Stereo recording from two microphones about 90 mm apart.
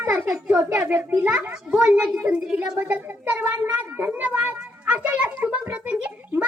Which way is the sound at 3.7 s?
15° right (ahead or behind).